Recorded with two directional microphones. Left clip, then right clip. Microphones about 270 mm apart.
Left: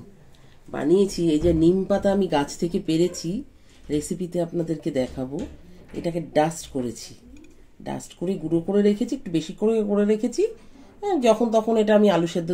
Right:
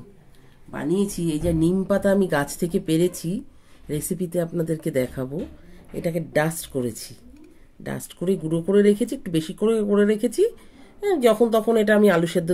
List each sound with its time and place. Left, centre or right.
0.7 s speech: right
7.8 s speech: right